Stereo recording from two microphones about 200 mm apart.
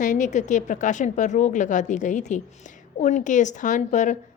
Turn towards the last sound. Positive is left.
turn(degrees=35)  # may be behind; listen again after turning